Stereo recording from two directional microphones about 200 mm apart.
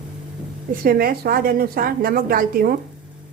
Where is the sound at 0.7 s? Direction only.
45° right (ahead or behind).